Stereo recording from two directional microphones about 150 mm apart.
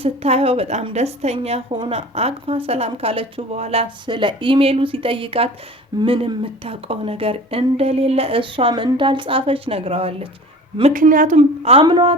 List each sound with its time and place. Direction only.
0.0 s a woman's voice: 40° right (ahead or behind)
4.0 s speech: 30° right (ahead or behind)
10.9 s speech: 60° right (ahead or behind)
11.3 s a woman's voice: 45° right (ahead or behind)
11.8 s speech: 30° right (ahead or behind)